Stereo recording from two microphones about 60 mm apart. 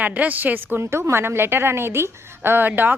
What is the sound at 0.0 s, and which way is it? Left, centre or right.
Speech, right.